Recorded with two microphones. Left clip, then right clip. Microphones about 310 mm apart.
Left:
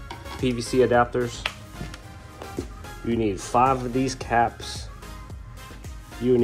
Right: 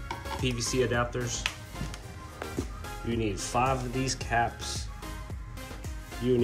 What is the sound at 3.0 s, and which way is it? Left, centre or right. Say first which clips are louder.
Speech: left 7 dB; centre.